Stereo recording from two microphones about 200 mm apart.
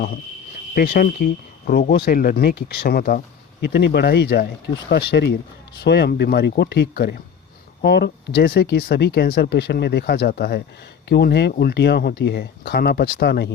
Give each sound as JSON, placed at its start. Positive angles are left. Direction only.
{"t": 0.7, "sound": "speech", "side_deg": 50}
{"t": 3.6, "sound": "speech", "side_deg": 60}